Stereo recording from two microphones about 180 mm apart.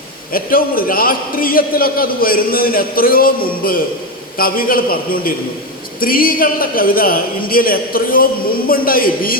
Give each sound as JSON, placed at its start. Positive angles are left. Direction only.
{"t": 0.3, "sound": "a man's voice", "side_deg": 55}